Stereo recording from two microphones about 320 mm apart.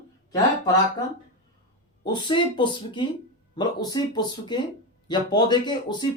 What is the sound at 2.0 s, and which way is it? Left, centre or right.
Speech, centre.